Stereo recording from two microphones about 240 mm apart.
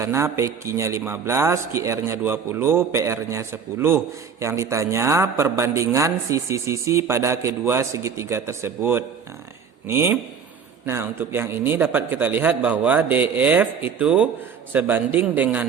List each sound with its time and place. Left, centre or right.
0.0 s a man's voice: centre